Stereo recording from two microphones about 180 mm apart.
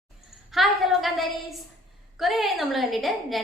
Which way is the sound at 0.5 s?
Centre (ahead or behind).